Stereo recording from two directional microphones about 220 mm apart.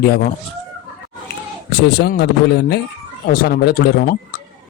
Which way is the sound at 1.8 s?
50° left (ahead or behind).